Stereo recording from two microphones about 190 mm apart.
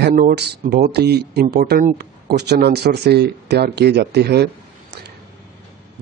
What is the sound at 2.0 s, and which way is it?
Speech, 60° right (ahead or behind).